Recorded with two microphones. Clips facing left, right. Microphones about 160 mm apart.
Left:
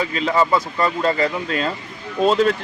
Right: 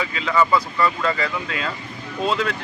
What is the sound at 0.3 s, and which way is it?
Speech, 30° left (ahead or behind).